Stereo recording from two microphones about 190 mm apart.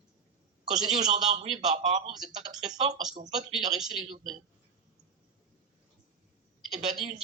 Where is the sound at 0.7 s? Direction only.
20° right (ahead or behind).